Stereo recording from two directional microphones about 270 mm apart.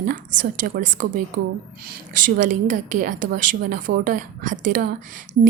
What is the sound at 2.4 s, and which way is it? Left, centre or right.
A woman's voice, right.